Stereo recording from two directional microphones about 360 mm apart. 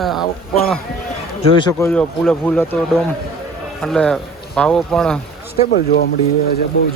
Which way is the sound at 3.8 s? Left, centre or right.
Centre.